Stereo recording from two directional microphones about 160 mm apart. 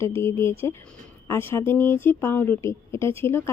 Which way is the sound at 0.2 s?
15° left (ahead or behind).